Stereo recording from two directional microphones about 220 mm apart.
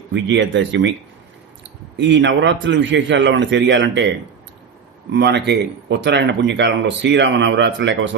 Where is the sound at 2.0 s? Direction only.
55° right (ahead or behind).